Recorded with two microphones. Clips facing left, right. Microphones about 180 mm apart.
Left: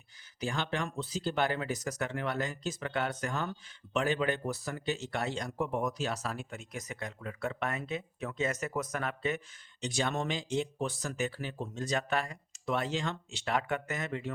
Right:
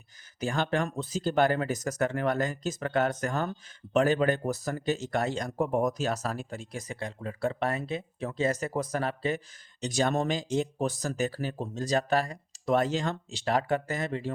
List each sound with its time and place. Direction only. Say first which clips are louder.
0.3 s speech: right 6 dB; 45° right (ahead or behind)